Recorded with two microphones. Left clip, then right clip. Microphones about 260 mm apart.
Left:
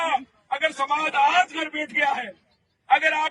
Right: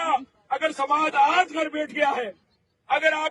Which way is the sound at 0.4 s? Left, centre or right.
Centre.